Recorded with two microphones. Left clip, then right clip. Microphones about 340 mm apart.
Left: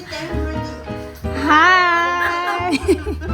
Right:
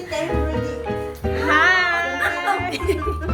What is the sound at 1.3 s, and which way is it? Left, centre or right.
Music, centre.